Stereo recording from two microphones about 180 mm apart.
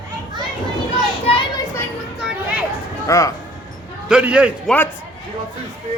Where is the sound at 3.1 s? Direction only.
15° left (ahead or behind).